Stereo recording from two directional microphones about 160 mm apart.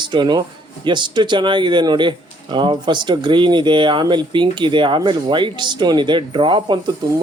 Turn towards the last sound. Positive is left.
turn(degrees=-30)  # may be behind; listen again after turning